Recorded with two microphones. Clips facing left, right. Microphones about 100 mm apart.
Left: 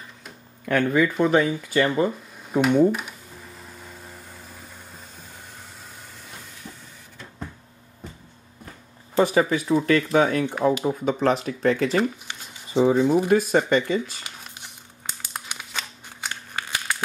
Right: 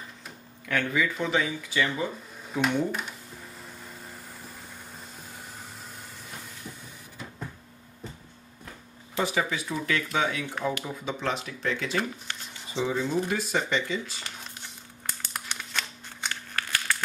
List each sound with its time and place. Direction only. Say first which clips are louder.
0.7 s speech: left 7 dB; 45° left (ahead or behind)
2.6 s speech: left 8 dB; 5° left (ahead or behind)
9.1 s speech: left 8 dB; 45° left (ahead or behind)
12.3 s a sound: left 1 dB; 15° left (ahead or behind)
12.7 s speech: left 9 dB; 50° left (ahead or behind)
15.4 s scissors: right 1 dB; 10° left (ahead or behind)
16.3 s crumpling: left 2 dB; 15° left (ahead or behind)